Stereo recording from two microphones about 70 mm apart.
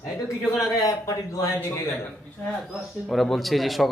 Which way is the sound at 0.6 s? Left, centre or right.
Left.